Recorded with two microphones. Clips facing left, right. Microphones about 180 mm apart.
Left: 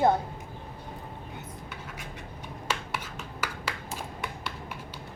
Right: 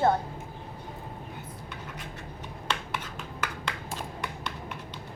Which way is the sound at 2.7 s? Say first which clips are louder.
Even; 10° left (ahead or behind).